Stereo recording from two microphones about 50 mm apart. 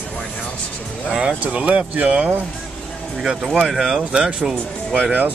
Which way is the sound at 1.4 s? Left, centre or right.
Right.